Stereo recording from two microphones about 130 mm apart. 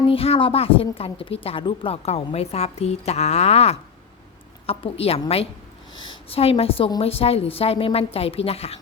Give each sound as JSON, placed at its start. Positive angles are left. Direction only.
{"t": 0.1, "sound": "a woman's voice", "side_deg": 50}
{"t": 6.3, "sound": "a woman's voice", "side_deg": 50}